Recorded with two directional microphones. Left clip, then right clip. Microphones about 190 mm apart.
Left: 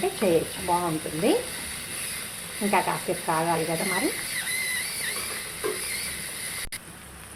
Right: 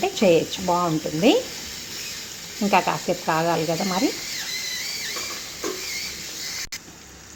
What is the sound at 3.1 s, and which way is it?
Speech, 50° right (ahead or behind).